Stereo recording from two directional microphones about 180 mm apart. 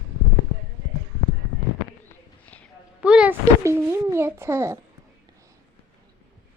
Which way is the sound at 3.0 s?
5° right (ahead or behind).